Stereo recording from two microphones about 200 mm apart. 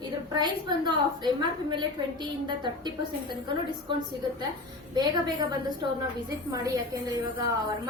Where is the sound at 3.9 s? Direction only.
25° right (ahead or behind).